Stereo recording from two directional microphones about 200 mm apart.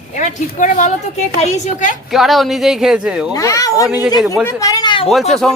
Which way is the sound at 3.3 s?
15° left (ahead or behind).